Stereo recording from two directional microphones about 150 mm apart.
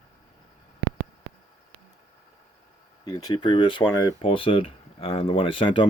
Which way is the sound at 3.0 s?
30° left (ahead or behind).